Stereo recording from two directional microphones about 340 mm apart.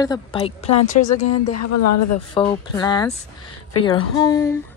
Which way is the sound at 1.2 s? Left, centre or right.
Left.